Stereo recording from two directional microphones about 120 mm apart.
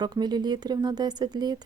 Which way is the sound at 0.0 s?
35° right (ahead or behind).